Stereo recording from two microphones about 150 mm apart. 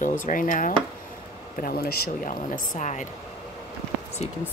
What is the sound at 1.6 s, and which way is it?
A woman's voice, 85° left.